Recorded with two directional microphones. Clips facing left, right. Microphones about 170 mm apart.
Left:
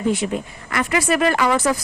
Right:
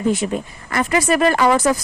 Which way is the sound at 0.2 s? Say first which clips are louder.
Right 1 dB; 30° right (ahead or behind).